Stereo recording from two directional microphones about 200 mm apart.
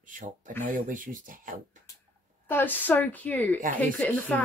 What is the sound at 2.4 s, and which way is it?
Speech, 10° left (ahead or behind).